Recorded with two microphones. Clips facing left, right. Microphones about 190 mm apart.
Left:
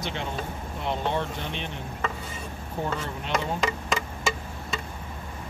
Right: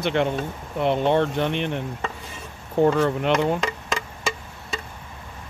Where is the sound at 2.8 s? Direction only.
65° right (ahead or behind).